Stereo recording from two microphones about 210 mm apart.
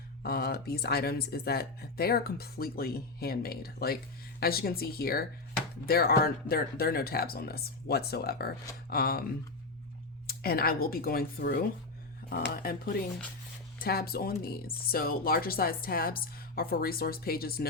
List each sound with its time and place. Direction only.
0.2 s speech: 45° left (ahead or behind)
10.2 s speech: 45° left (ahead or behind)